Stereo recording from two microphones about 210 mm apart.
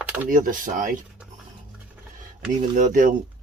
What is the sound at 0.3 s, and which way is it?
Speech, 40° right (ahead or behind).